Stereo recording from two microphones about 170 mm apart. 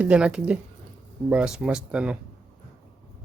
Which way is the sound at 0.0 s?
5° right (ahead or behind).